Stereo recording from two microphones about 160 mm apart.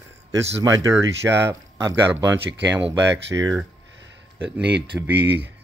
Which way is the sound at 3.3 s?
20° right (ahead or behind).